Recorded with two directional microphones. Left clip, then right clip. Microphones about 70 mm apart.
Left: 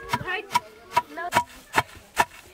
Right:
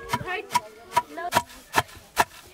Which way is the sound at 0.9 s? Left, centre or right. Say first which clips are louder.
Even; centre.